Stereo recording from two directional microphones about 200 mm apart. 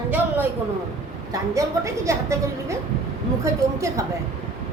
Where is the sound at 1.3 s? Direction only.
15° right (ahead or behind).